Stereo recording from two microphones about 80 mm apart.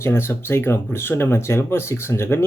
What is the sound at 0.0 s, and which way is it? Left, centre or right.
Speech, left.